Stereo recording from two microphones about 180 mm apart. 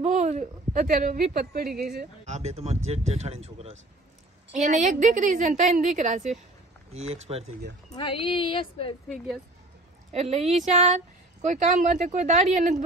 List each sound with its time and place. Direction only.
0.0 s a woman's voice: 40° right (ahead or behind); by 2.0 s 60° right (ahead or behind)
2.2 s a woman's voice: 35° right (ahead or behind)
7.9 s speech: 30° left (ahead or behind)
10.1 s a woman's voice: 35° right (ahead or behind)